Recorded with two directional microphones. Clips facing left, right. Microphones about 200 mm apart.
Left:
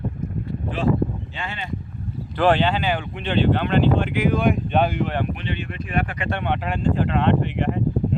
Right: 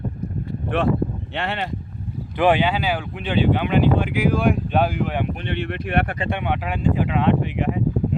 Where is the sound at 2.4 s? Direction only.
10° right (ahead or behind).